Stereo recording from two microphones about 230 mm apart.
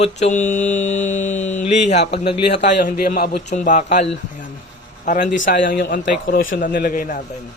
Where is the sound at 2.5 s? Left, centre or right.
Left.